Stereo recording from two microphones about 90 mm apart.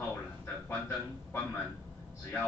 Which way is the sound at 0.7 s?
25° left (ahead or behind).